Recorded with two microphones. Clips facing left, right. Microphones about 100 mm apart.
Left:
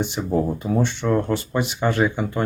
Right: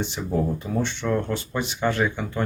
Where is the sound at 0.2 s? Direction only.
25° left (ahead or behind).